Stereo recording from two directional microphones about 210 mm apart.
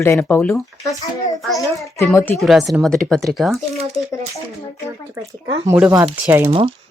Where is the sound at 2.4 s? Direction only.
Centre (ahead or behind).